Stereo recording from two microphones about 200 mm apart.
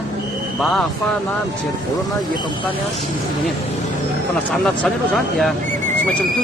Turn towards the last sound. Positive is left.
turn(degrees=0)  # may be behind; listen again after turning